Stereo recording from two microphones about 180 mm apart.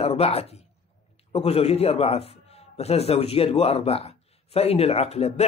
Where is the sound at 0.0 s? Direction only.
35° left (ahead or behind).